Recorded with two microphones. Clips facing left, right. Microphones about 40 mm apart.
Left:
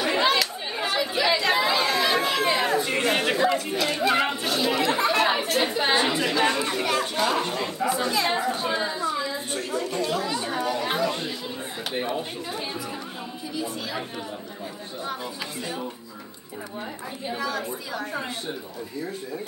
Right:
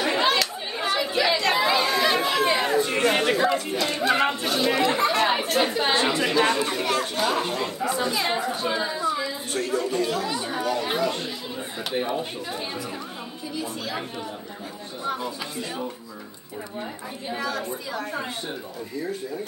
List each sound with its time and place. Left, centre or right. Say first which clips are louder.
0.0 s chatter: even; centre
6.2 s speech: right 1 dB; centre
8.6 s a sound: right 1 dB; centre
10.0 s speech: even; centre
10.6 s chatter: right 2 dB; centre
10.9 s speech: even; centre
15.0 s speech: right 4 dB; centre
17.3 s speech: right 1 dB; centre